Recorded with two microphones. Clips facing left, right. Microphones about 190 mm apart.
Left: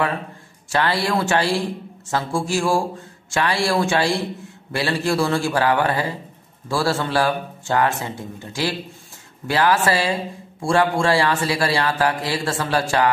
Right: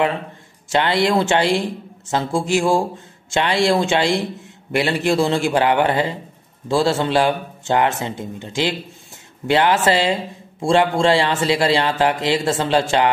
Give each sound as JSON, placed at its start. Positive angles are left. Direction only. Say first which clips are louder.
{"t": 0.7, "sound": "a man's voice", "louder": "right 3 dB", "side_deg": -20}